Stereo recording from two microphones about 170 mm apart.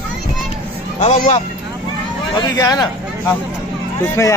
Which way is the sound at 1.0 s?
30° left (ahead or behind).